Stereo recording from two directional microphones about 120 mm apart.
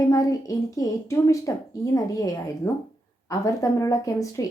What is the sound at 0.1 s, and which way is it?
A woman's voice, 25° left (ahead or behind).